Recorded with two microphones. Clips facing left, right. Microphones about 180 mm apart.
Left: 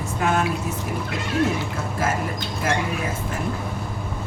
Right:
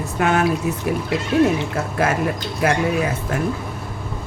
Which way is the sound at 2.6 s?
65° right (ahead or behind).